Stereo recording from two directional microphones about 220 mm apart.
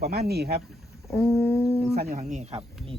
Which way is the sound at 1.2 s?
5° left (ahead or behind).